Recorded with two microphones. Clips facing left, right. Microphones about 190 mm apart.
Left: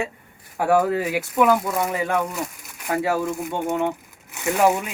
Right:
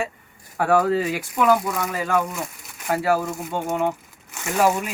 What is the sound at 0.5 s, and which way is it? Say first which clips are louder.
Speech: even; 10° left (ahead or behind).